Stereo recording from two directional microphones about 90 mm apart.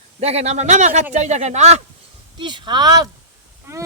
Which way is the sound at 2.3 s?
60° right (ahead or behind).